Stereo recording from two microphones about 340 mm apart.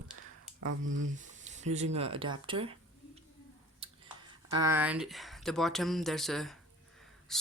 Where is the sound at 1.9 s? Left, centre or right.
Centre.